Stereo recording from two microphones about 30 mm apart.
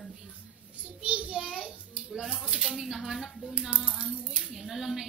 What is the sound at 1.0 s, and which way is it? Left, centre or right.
A child's voice, right.